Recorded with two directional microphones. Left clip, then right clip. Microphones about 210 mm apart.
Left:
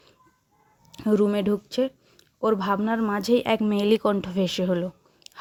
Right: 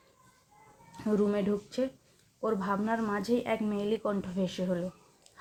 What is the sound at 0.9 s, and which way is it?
Speech, 40° left (ahead or behind).